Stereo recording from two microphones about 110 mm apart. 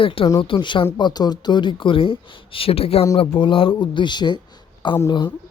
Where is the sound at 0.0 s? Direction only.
55° left (ahead or behind).